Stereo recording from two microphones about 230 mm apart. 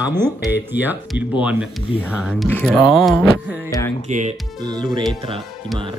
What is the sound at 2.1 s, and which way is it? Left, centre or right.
Music, centre.